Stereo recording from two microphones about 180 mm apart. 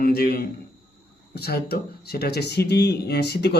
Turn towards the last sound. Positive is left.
turn(degrees=65)  # may be behind; listen again after turning